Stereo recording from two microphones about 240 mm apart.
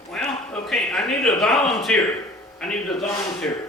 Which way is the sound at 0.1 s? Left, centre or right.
Centre.